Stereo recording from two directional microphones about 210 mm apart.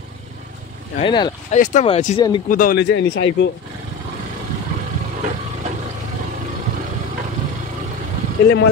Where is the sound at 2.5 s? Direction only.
45° left (ahead or behind); by 3.5 s 60° left (ahead or behind).